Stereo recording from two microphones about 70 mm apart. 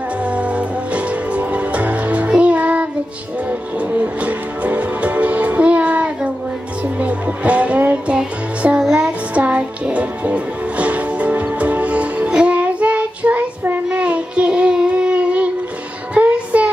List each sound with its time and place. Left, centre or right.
0.2 s music: centre
4.0 s music: right